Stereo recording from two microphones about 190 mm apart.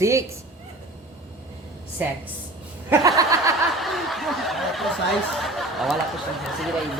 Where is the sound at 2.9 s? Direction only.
20° right (ahead or behind).